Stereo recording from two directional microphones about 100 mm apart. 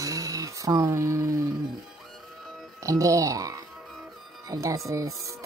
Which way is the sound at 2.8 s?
35° right (ahead or behind).